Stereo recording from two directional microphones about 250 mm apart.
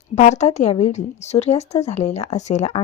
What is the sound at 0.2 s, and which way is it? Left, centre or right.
Speech, left.